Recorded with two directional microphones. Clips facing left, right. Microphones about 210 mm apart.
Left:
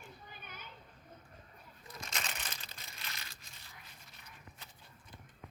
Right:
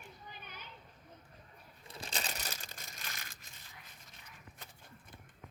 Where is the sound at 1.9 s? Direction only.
35° right (ahead or behind); by 3.4 s 50° right (ahead or behind).